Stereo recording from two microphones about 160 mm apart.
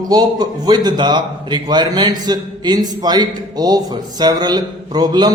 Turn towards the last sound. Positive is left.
turn(degrees=-25)  # may be behind; listen again after turning